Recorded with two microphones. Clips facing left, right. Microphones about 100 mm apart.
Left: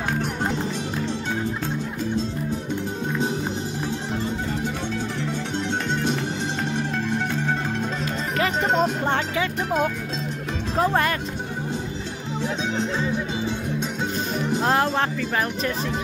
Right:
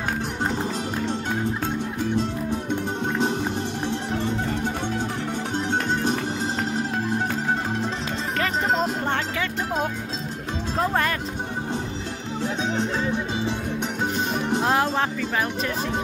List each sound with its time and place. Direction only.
5.7 s music: 45° right (ahead or behind)
8.4 s music: centre (ahead or behind)
10.8 s speech: 5° left (ahead or behind)
14.6 s speech: 10° right (ahead or behind)